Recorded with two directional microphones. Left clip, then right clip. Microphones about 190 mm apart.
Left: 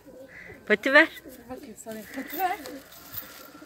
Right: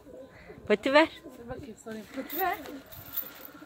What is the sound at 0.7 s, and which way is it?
Speech, 5° right (ahead or behind).